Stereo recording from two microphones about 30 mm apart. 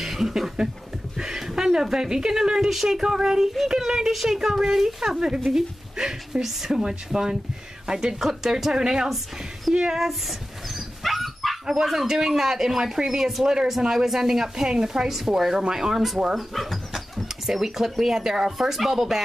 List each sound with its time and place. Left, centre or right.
0.0 s a sound: centre
0.6 s speech: right
1.1 s a sound: right
1.5 s speech: centre
2.7 s speech: centre
9.9 s speech: centre
11.0 s dog: centre
11.6 s speech: centre
13.7 s speech: centre
16.7 s dog: centre
17.5 s speech: centre
18.6 s speech: centre